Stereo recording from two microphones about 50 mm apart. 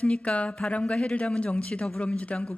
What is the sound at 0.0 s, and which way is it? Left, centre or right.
Speech, left.